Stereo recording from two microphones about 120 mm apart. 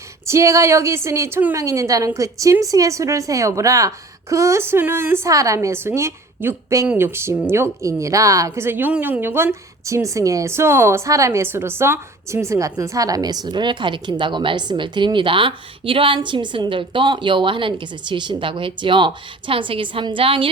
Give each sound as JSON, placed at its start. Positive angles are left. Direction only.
{"t": 0.3, "sound": "a woman's voice", "side_deg": -25}